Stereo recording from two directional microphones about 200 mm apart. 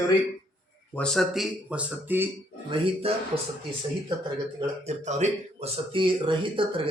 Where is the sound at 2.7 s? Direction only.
25° right (ahead or behind).